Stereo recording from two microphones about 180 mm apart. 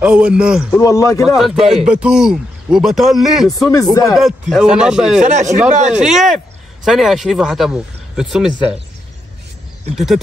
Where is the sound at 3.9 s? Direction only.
20° left (ahead or behind).